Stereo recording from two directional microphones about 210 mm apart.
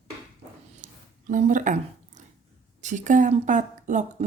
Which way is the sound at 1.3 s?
40° right (ahead or behind).